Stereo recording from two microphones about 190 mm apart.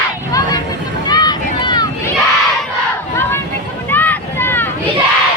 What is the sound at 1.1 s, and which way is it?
Boat, 20° left (ahead or behind).